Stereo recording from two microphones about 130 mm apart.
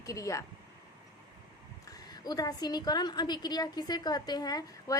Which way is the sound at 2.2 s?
30° left (ahead or behind).